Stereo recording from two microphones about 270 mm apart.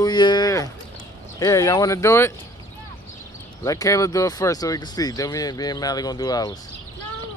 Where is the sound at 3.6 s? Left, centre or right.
Centre.